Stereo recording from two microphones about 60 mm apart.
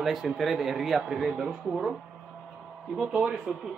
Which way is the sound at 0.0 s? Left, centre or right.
Centre.